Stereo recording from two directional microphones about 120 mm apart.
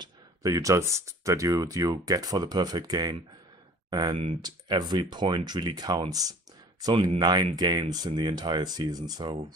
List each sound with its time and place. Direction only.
0.0 s speech: 30° right (ahead or behind)